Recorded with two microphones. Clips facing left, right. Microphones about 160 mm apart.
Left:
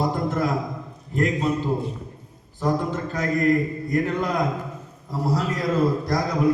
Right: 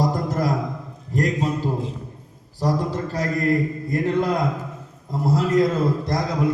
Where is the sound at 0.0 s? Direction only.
40° right (ahead or behind).